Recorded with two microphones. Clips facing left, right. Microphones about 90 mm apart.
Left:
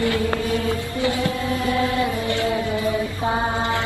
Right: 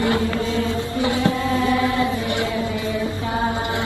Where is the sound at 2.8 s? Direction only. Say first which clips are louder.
Left 1 dB; 25° left (ahead or behind).